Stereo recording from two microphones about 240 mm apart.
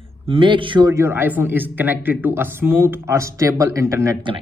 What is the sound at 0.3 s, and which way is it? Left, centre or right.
A man's voice, right.